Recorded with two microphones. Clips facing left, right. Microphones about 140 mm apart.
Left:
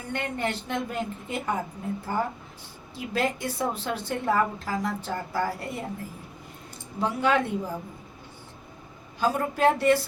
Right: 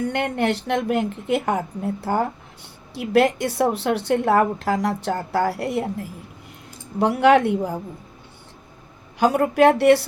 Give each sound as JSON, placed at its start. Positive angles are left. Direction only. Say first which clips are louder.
{"t": 0.1, "sound": "a woman's voice", "louder": "right 7 dB", "side_deg": -70}
{"t": 7.0, "sound": "a woman's voice", "louder": "right 9 dB", "side_deg": -70}
{"t": 9.1, "sound": "a woman's voice", "louder": "right 9 dB", "side_deg": -80}